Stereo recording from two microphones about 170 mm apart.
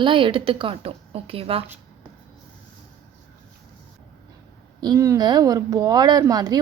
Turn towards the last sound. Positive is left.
turn(degrees=-20)  # may be behind; listen again after turning